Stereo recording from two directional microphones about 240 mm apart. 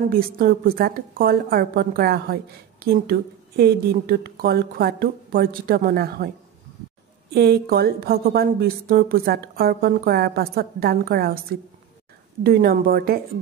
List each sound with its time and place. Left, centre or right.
0.1 s a woman's voice: right
7.3 s a woman's voice: right
12.4 s a woman's voice: right